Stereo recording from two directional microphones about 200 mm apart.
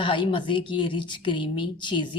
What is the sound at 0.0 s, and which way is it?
Speech, 25° left (ahead or behind).